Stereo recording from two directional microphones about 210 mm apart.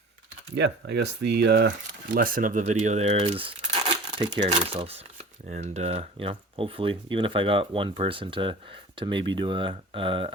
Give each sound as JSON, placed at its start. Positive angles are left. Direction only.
{"t": 0.5, "sound": "speech", "side_deg": -55}
{"t": 2.1, "sound": "speech", "side_deg": -40}